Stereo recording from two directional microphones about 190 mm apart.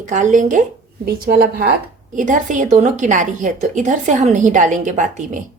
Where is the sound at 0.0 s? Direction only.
40° right (ahead or behind).